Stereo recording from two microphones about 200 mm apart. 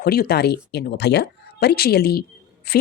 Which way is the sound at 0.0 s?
50° left (ahead or behind).